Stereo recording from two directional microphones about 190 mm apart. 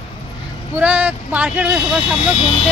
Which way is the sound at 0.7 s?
10° right (ahead or behind).